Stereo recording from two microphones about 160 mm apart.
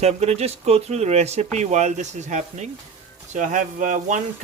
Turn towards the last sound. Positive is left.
turn(degrees=-55)  # may be behind; listen again after turning